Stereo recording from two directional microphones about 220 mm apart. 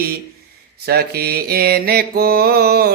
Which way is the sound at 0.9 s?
45° right (ahead or behind).